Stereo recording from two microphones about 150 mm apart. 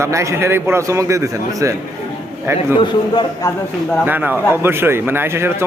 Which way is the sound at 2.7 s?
30° left (ahead or behind).